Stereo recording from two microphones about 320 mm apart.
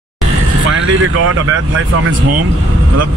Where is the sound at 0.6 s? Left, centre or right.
Right.